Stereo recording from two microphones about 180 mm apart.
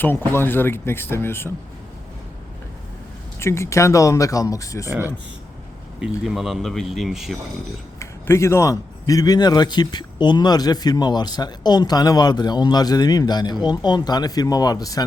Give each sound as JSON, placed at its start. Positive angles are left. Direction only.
{"t": 0.3, "sound": "speech", "side_deg": 10}
{"t": 3.4, "sound": "speech", "side_deg": 15}
{"t": 4.9, "sound": "speech", "side_deg": -10}
{"t": 7.9, "sound": "a man's voice", "side_deg": 15}